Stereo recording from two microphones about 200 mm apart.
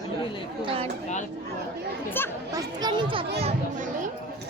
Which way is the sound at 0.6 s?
30° right (ahead or behind).